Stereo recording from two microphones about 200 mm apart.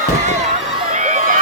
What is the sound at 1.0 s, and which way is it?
Crowd, 35° right (ahead or behind).